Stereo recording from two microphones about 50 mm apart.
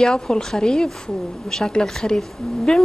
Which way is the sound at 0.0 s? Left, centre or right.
Centre.